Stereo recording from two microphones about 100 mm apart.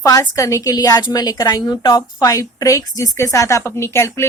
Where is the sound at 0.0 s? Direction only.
35° left (ahead or behind).